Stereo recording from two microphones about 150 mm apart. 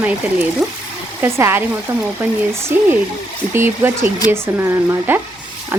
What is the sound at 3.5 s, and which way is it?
Speech, 15° right (ahead or behind).